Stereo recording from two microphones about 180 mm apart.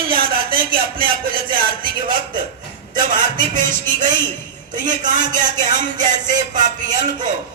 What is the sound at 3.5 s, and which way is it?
Speech, 45° right (ahead or behind).